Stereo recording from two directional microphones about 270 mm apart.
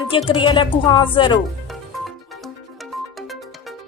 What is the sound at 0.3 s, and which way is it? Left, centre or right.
A woman's voice, centre.